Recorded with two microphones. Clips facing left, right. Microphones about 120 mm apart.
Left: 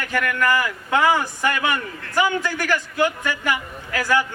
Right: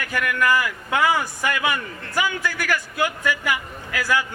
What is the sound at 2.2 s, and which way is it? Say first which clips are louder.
Speech: left 4 dB; 20° left (ahead or behind).